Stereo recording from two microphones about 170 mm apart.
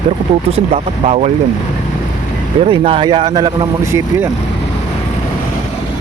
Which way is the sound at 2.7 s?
30° right (ahead or behind).